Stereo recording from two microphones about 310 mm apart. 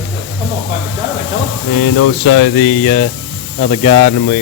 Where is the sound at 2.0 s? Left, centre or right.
Left.